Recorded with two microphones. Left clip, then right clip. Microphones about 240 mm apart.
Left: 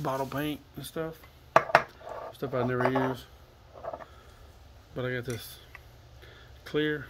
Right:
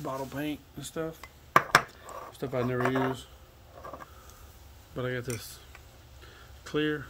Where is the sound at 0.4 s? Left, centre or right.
Centre.